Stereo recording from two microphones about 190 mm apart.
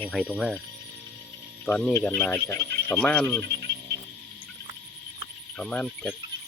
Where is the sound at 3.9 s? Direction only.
60° right (ahead or behind).